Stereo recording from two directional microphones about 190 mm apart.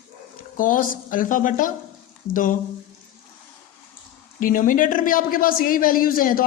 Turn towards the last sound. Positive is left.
turn(degrees=50)  # may be behind; listen again after turning